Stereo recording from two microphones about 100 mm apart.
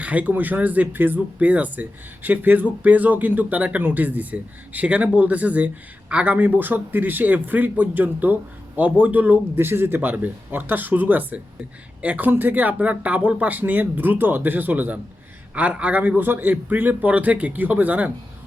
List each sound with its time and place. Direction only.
0.0 s speech: 15° right (ahead or behind)